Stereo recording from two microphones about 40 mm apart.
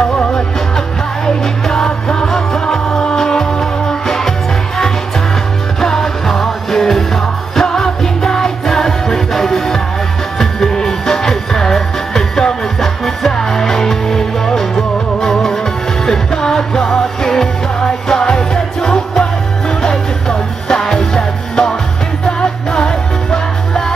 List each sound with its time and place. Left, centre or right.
0.3 s music: centre
5.8 s music: centre